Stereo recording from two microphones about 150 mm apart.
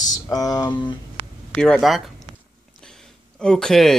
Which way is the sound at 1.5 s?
5° left (ahead or behind).